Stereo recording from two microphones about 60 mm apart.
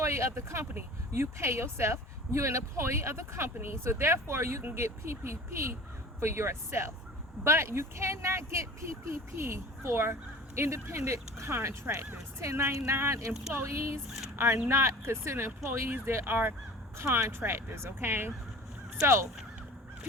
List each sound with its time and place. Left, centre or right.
0.0 s speech: right
0.6 s speech: right
1.1 s speech: right
11.9 s speech: right
12.4 s speech: right
19.0 s speech: right